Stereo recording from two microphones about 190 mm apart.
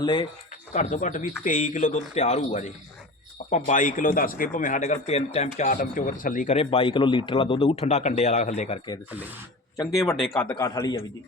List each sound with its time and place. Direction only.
0.0 s a man's voice: 25° left (ahead or behind)
0.7 s a man's voice: 40° left (ahead or behind)
6.6 s speech: 30° left (ahead or behind)
9.7 s speech: 15° left (ahead or behind)
10.2 s a man's voice: 5° left (ahead or behind)
10.8 s a man's voice: 20° left (ahead or behind)